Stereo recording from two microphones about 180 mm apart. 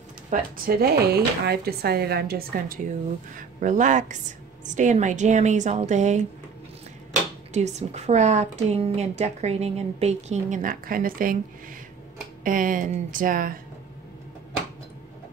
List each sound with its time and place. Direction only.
0.3 s speech: 55° right (ahead or behind)
3.3 s a woman's voice: 45° right (ahead or behind)
7.5 s a woman's voice: 40° right (ahead or behind)
12.4 s speech: 50° right (ahead or behind)